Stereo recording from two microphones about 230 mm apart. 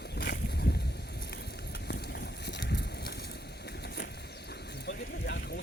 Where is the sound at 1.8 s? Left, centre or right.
Left.